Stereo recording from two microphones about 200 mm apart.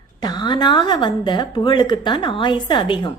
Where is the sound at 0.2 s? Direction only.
20° left (ahead or behind).